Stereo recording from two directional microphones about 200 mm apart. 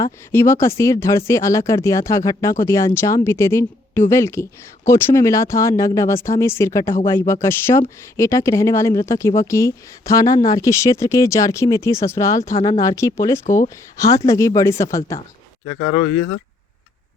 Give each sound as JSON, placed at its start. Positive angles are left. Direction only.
{"t": 0.0, "sound": "speech", "side_deg": 15}
{"t": 7.4, "sound": "speech", "side_deg": 15}
{"t": 13.4, "sound": "speech", "side_deg": 40}
{"t": 13.9, "sound": "speech", "side_deg": 15}
{"t": 15.8, "sound": "speech", "side_deg": 30}